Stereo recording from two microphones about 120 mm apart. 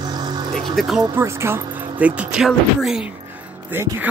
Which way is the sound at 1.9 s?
10° right (ahead or behind).